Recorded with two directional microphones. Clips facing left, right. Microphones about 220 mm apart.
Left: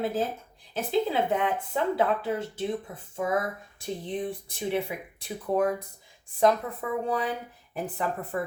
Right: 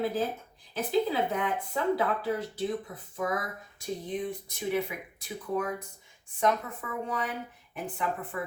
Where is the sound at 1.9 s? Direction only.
25° left (ahead or behind).